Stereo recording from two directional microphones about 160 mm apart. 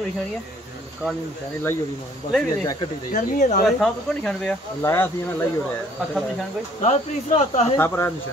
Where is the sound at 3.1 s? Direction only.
55° left (ahead or behind).